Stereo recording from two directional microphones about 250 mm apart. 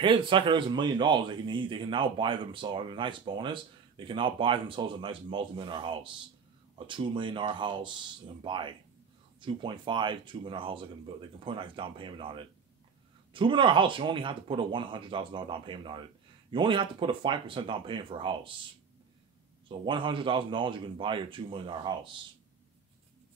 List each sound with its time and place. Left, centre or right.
0.0 s speech: centre
19.7 s speech: centre